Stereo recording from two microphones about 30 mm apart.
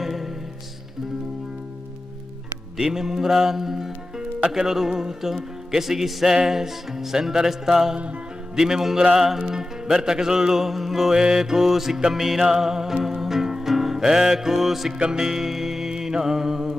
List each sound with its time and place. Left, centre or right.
0.0 s music: centre
2.8 s speech: centre
9.4 s music: centre
10.0 s speech: right
12.1 s music: centre
15.0 s music: right
15.4 s music: centre